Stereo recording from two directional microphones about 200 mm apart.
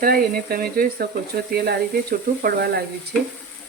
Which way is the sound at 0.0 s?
50° right (ahead or behind).